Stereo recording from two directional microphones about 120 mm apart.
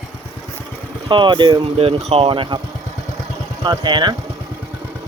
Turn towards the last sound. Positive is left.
turn(degrees=-40)  # may be behind; listen again after turning